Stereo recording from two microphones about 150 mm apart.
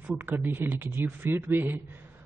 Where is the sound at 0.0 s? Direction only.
10° right (ahead or behind).